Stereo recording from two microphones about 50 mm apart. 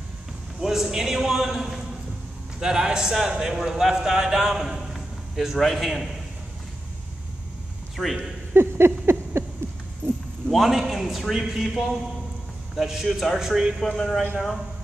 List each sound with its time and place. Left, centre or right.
0.6 s a man's voice: centre
8.0 s a man's voice: centre
8.5 s a sound: right
10.5 s a man's voice: centre
13.7 s a man's voice: centre